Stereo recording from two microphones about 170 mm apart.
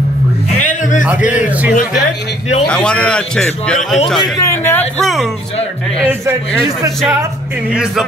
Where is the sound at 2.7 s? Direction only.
5° left (ahead or behind).